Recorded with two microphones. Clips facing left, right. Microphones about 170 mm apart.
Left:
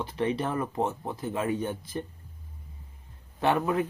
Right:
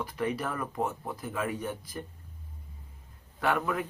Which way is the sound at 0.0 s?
25° left (ahead or behind).